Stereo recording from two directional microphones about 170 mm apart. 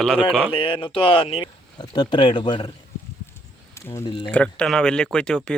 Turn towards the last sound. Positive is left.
turn(degrees=5)  # may be behind; listen again after turning